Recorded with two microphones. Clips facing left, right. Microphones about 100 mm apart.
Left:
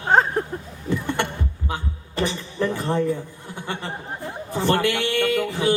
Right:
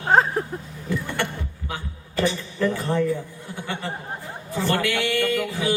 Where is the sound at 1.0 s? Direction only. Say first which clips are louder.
Left 3 dB; 20° left (ahead or behind).